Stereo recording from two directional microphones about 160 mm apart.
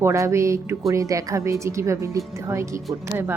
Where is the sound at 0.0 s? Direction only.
15° right (ahead or behind).